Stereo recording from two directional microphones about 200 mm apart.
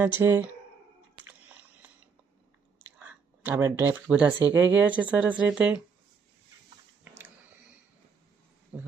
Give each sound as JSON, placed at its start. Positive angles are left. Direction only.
{"t": 0.0, "sound": "speech", "side_deg": -10}
{"t": 3.0, "sound": "speech", "side_deg": -10}
{"t": 8.7, "sound": "speech", "side_deg": -5}